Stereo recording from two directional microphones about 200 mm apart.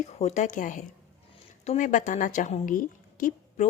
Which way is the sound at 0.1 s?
35° left (ahead or behind).